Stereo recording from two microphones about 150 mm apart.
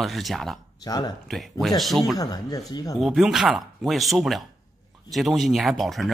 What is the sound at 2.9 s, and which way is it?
Speech, 5° right (ahead or behind).